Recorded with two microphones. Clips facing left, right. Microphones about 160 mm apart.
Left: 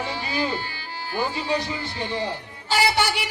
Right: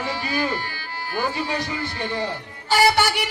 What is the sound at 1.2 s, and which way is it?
Speech, 55° right (ahead or behind).